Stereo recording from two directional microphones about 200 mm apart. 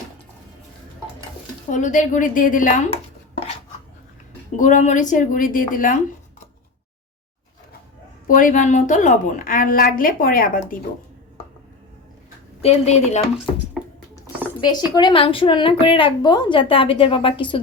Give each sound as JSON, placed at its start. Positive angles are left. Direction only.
{"t": 1.7, "sound": "a woman's voice", "side_deg": 40}
{"t": 4.5, "sound": "a woman's voice", "side_deg": 40}
{"t": 8.3, "sound": "a woman's voice", "side_deg": 40}
{"t": 12.6, "sound": "a woman's voice", "side_deg": 30}
{"t": 13.8, "sound": "a sound", "side_deg": 0}
{"t": 14.6, "sound": "a woman's voice", "side_deg": 20}